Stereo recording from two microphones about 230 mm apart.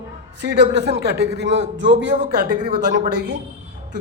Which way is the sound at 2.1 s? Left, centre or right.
Right.